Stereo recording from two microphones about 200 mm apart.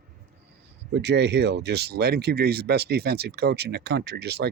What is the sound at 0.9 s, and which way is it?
Speech, 60° right (ahead or behind).